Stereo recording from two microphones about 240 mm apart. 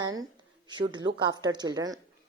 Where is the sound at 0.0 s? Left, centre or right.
Centre.